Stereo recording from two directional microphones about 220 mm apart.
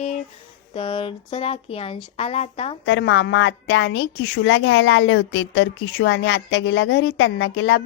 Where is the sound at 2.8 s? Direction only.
55° left (ahead or behind).